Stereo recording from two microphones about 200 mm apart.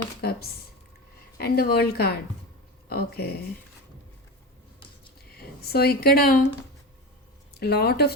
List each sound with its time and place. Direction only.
0.2 s a sound: 50° left (ahead or behind)
1.4 s a woman's voice: 50° left (ahead or behind)
5.3 s a woman's voice: 50° left (ahead or behind)
7.5 s speech: 55° left (ahead or behind)